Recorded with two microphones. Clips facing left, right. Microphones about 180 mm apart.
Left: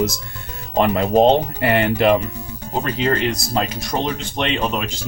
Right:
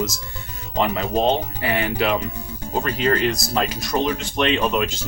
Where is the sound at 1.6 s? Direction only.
65° left (ahead or behind).